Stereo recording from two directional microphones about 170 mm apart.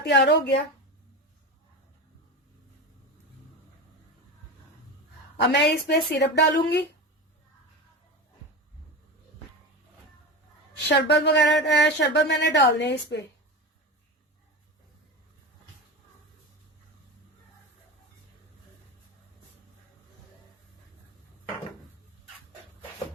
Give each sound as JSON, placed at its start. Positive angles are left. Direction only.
{"t": 0.0, "sound": "speech", "side_deg": 90}
{"t": 5.4, "sound": "speech", "side_deg": 90}
{"t": 5.8, "sound": "speech", "side_deg": 75}
{"t": 10.8, "sound": "speech", "side_deg": 85}